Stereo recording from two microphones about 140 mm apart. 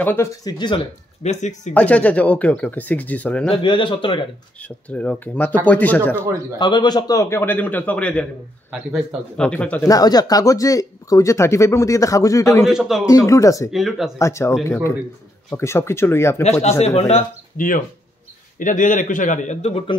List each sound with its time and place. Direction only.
0.0 s speech: 15° left (ahead or behind)
0.4 s speech: 30° left (ahead or behind)
1.2 s speech: 55° left (ahead or behind)
1.7 s speech: 10° left (ahead or behind)
3.4 s speech: 40° left (ahead or behind)
4.6 s speech: 10° left (ahead or behind)
6.6 s speech: 30° left (ahead or behind); by 9.8 s 10° left (ahead or behind)
9.8 s speech: 25° left (ahead or behind)
12.6 s speech: centre (ahead or behind)
13.0 s speech: 25° left (ahead or behind)
13.7 s speech: centre (ahead or behind)
14.1 s speech: 20° left (ahead or behind)
16.6 s a man's voice: 50° left (ahead or behind)
17.6 s a man's voice: 75° left (ahead or behind); by 19.8 s 50° left (ahead or behind)